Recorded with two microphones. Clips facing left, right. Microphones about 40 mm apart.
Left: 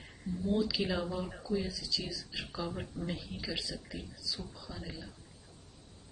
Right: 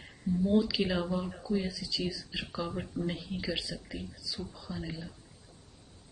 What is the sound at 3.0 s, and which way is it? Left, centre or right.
Speech, centre.